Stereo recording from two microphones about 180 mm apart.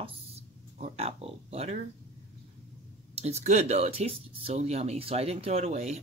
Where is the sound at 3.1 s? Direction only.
35° right (ahead or behind).